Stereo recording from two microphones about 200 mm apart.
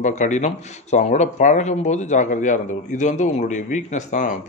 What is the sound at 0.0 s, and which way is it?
Speech, 35° left (ahead or behind).